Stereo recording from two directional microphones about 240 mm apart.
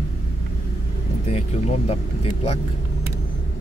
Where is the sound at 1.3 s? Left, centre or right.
Left.